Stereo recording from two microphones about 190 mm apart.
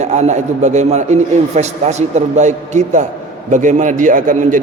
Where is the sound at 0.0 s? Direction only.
40° right (ahead or behind).